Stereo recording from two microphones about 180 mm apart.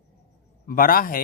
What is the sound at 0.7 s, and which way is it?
Speech, 50° left (ahead or behind).